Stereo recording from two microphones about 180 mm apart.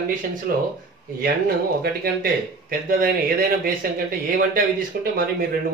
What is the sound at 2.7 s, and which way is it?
Speech, 55° right (ahead or behind).